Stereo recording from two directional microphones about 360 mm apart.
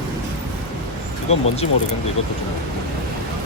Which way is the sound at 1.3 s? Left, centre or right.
Centre.